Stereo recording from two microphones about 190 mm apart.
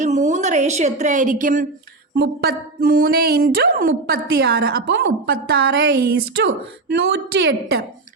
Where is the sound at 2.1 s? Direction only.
55° right (ahead or behind).